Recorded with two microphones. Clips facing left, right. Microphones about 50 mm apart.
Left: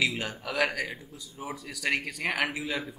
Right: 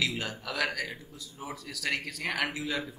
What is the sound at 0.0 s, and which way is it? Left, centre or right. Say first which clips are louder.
A man's voice: left 3 dB; centre.